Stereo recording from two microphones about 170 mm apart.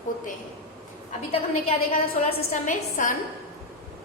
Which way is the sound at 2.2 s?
45° left (ahead or behind).